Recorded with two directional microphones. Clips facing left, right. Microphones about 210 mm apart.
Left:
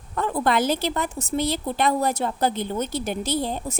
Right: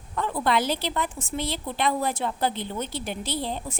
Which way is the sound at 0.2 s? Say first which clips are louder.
Left 3 dB; 45° left (ahead or behind).